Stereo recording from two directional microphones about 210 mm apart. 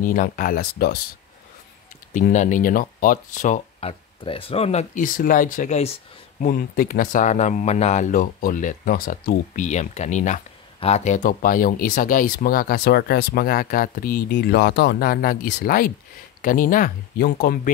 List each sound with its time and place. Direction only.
0.0 s speech: 40° left (ahead or behind)
2.1 s speech: 35° left (ahead or behind)